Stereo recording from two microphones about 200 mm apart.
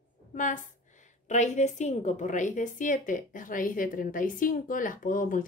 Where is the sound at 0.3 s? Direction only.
40° left (ahead or behind).